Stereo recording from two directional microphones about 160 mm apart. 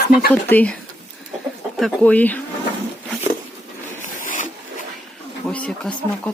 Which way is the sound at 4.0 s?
55° left (ahead or behind).